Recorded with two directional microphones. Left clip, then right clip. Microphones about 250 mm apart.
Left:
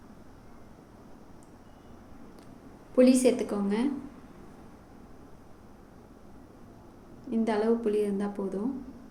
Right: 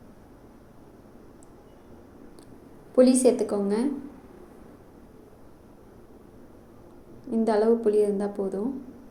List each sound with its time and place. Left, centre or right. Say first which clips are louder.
2.9 s a woman's voice: right 3 dB; centre
7.3 s a woman's voice: right 5 dB; centre